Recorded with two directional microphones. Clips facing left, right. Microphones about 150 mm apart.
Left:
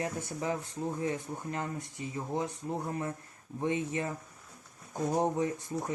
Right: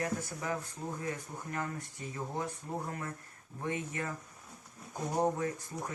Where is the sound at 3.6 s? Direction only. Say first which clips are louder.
Left 5 dB; 20° left (ahead or behind).